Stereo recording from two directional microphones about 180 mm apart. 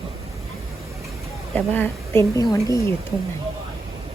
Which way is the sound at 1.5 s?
10° left (ahead or behind).